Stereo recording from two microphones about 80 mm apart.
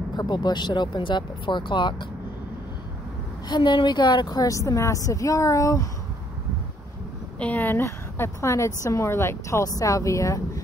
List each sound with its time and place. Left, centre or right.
0.1 s speech: left
3.4 s a woman's voice: left
7.3 s a woman's voice: centre
7.8 s a woman's voice: left